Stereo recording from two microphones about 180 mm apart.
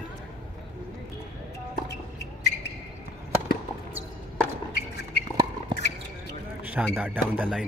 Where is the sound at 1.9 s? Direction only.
70° left (ahead or behind).